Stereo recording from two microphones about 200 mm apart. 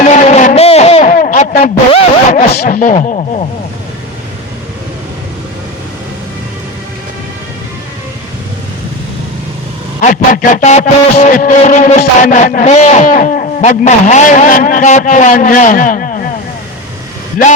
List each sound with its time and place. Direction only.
0.0 s a sound: 35° left (ahead or behind)
1.1 s speech: 45° left (ahead or behind)
2.5 s a man's voice: 50° left (ahead or behind)
10.0 s a man's voice: 40° left (ahead or behind)
17.4 s a man's voice: 45° left (ahead or behind)